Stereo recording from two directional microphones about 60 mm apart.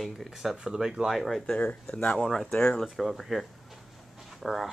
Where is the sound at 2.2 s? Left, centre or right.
Centre.